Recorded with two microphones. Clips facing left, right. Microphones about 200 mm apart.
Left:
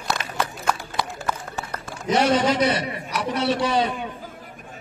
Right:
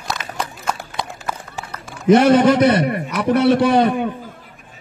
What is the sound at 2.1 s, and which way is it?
A man's voice, 55° right (ahead or behind).